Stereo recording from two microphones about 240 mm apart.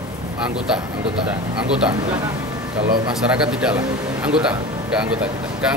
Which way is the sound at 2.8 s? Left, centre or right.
Centre.